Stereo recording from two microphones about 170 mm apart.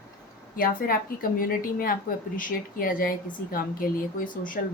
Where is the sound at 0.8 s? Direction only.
60° left (ahead or behind).